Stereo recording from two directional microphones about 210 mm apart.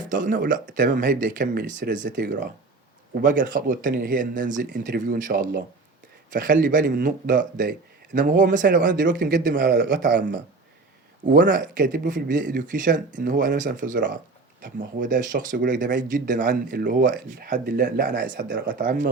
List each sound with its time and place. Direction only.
0.1 s speech: 40° right (ahead or behind)
3.2 s speech: 40° right (ahead or behind)
11.4 s speech: 40° right (ahead or behind)